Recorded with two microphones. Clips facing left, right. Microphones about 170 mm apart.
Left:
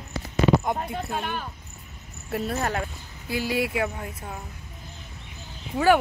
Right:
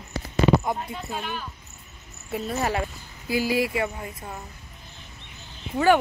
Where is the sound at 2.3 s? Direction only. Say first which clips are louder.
Right 1 dB; centre (ahead or behind).